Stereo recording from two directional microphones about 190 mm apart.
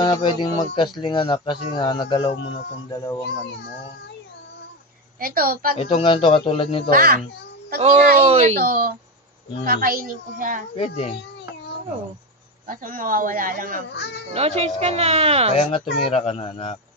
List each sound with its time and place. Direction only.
0.0 s speech: 25° left (ahead or behind)
5.2 s speech: 50° right (ahead or behind)
5.8 s speech: 30° left (ahead or behind)
6.9 s speech: 50° right (ahead or behind)
8.3 s a woman's voice: 35° right (ahead or behind)
8.5 s speech: 50° right (ahead or behind)
10.8 s speech: 30° left (ahead or behind)
12.6 s speech: 45° right (ahead or behind)
14.3 s a woman's voice: 35° right (ahead or behind)
15.5 s speech: 30° left (ahead or behind)